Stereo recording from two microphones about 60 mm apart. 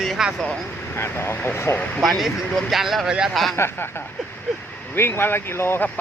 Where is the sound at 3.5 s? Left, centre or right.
Left.